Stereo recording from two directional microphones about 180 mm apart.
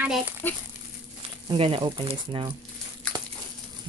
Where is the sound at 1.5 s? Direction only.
30° right (ahead or behind).